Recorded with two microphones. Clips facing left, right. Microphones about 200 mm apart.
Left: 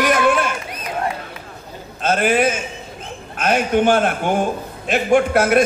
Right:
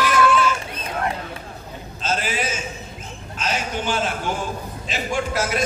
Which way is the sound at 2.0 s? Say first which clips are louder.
Left 9 dB; 55° left (ahead or behind).